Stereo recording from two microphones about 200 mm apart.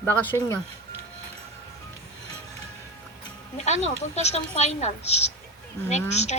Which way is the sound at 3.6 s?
35° left (ahead or behind).